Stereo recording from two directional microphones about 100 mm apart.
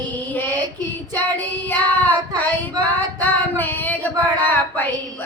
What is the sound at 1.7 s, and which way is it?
Female singing, 15° left (ahead or behind).